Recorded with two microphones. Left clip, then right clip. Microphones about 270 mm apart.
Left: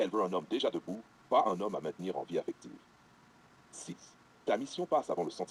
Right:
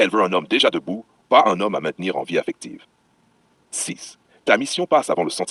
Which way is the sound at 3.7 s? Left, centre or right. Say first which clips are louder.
Right 18 dB; right.